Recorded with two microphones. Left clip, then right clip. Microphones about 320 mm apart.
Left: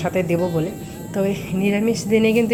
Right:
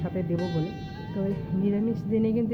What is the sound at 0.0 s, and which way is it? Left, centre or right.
A woman's voice, centre.